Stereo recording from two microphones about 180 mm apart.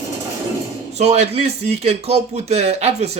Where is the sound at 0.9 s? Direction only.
35° right (ahead or behind).